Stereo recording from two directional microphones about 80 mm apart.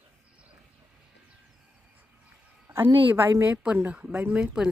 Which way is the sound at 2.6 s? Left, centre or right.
Right.